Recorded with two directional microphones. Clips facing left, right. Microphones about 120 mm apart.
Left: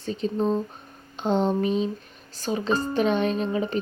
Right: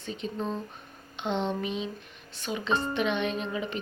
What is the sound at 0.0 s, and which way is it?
A woman's voice, 35° left (ahead or behind).